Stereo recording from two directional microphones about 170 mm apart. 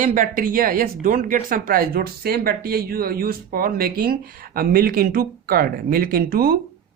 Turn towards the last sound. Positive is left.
turn(degrees=-60)  # may be behind; listen again after turning